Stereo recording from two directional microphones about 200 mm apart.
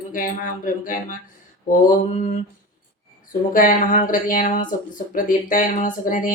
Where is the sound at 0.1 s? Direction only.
45° left (ahead or behind).